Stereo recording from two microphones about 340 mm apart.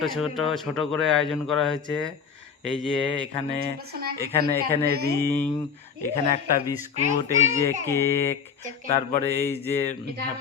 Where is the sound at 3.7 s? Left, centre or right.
Right.